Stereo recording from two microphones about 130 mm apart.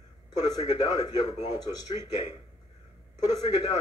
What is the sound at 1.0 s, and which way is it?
Speech, 55° left (ahead or behind).